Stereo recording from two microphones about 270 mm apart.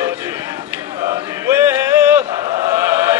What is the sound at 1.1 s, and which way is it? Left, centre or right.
Chant, centre.